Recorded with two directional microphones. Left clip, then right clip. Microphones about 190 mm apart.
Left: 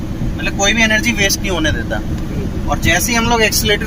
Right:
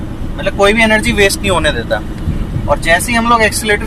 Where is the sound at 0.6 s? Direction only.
40° right (ahead or behind).